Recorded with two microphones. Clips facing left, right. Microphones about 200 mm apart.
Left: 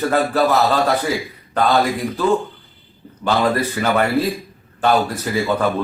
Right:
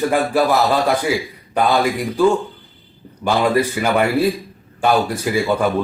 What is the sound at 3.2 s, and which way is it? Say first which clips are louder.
A man's voice: right 2 dB; 10° right (ahead or behind).